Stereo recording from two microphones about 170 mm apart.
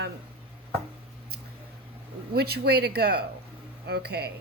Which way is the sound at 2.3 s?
70° right (ahead or behind).